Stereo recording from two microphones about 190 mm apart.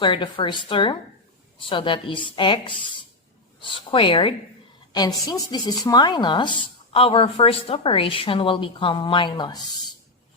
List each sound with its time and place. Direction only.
0.0 s speech: 25° left (ahead or behind)